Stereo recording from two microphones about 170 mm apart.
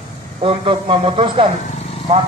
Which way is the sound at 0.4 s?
30° right (ahead or behind).